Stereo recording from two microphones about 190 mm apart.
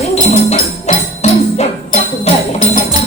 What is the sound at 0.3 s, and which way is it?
Music, 40° left (ahead or behind).